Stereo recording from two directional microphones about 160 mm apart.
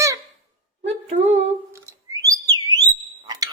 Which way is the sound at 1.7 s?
20° right (ahead or behind).